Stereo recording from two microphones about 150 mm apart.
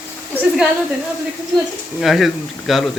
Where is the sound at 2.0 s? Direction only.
Centre (ahead or behind).